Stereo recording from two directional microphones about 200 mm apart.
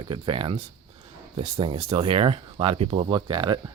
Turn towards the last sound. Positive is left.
turn(degrees=-20)  # may be behind; listen again after turning